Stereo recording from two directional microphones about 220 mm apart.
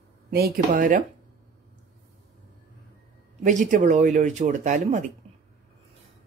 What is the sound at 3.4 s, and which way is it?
Speech, 35° right (ahead or behind).